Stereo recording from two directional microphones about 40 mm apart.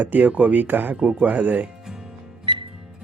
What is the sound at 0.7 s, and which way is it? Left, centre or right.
Speech, right.